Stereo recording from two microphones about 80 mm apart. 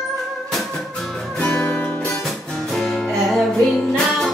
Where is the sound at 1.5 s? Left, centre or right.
Left.